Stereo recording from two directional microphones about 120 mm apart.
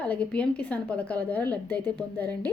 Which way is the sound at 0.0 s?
10° left (ahead or behind).